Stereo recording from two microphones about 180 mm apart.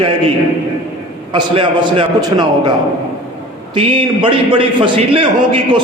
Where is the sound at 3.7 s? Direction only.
30° right (ahead or behind).